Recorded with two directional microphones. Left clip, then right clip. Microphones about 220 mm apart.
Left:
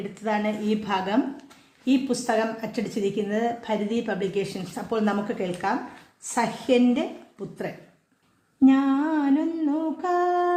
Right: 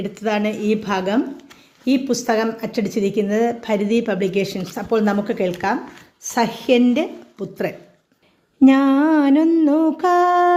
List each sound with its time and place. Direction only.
0.1 s a woman's voice: 25° right (ahead or behind)
8.6 s humming: 35° right (ahead or behind)